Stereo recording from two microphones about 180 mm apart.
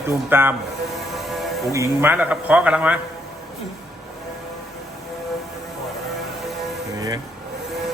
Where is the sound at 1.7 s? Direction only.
15° right (ahead or behind).